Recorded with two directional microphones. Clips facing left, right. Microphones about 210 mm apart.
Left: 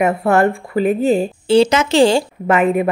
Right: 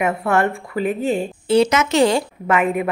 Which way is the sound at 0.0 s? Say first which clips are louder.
Left 4 dB; 35° left (ahead or behind).